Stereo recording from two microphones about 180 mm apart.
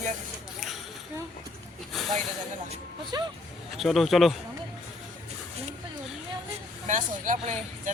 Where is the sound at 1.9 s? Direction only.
Centre (ahead or behind).